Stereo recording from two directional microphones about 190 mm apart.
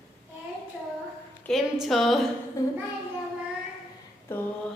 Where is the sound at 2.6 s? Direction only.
15° left (ahead or behind).